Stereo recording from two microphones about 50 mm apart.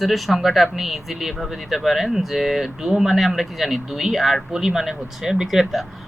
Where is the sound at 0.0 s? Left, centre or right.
Centre.